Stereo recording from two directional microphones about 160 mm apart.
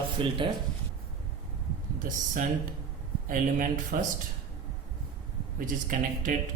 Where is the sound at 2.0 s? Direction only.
55° right (ahead or behind).